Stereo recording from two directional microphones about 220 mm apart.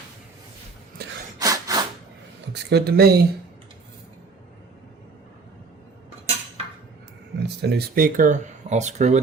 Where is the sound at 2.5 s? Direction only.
45° right (ahead or behind).